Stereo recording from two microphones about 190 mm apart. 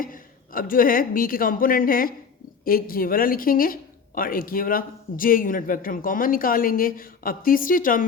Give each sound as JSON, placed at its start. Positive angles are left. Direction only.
{"t": 0.0, "sound": "a woman's voice", "side_deg": 45}